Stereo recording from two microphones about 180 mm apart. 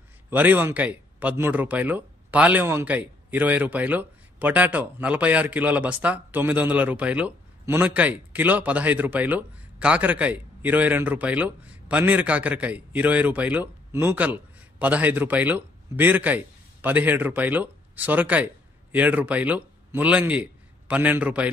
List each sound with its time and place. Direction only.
0.3 s speech: 10° right (ahead or behind)